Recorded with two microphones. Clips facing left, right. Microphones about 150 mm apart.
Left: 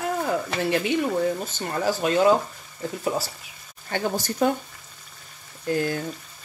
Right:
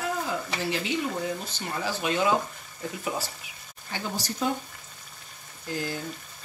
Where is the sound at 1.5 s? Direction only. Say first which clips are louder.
Left 6 dB; 45° left (ahead or behind).